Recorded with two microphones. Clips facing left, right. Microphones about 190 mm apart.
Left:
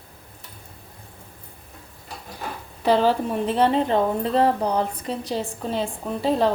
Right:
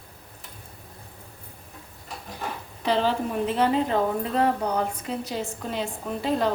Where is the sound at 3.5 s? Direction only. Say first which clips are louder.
Left 3 dB; 30° left (ahead or behind).